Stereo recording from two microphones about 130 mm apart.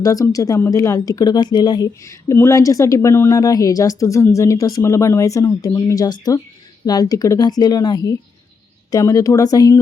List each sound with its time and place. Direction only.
0.0 s speech: 25° left (ahead or behind)